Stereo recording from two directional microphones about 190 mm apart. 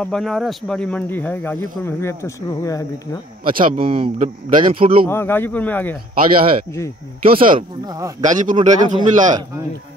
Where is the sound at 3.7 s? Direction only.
30° right (ahead or behind).